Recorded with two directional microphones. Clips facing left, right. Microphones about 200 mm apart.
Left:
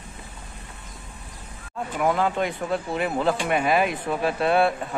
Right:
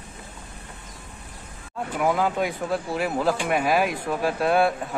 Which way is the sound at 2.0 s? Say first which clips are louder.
Even; 5° right (ahead or behind).